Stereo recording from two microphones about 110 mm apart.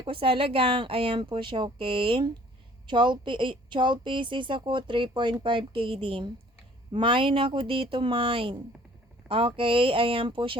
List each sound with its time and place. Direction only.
0.0 s a woman's voice: 50° right (ahead or behind)